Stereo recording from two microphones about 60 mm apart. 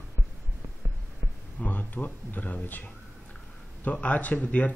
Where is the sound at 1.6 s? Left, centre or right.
Left.